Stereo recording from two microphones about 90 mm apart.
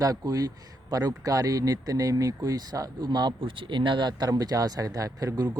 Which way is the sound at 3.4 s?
70° right (ahead or behind).